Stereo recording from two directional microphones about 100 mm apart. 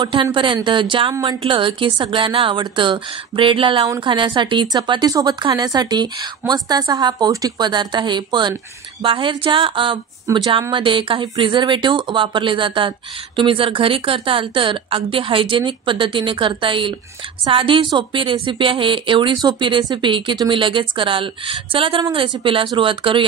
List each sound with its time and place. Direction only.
0.0 s a woman's voice: 55° right (ahead or behind)